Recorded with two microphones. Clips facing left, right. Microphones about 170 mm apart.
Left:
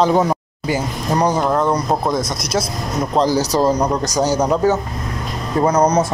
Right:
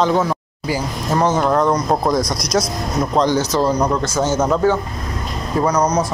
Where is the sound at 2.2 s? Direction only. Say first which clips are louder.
Right 2 dB; 25° left (ahead or behind).